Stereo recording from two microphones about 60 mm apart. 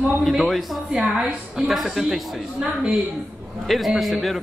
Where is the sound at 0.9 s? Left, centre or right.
Centre.